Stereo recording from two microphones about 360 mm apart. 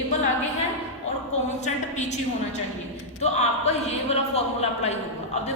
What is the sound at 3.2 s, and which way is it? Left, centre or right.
A man's voice, centre.